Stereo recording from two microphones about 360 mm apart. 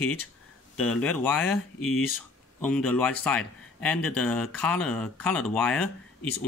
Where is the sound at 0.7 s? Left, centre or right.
Centre.